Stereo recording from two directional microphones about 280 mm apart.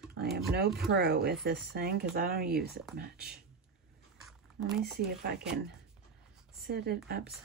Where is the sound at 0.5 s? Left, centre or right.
Right.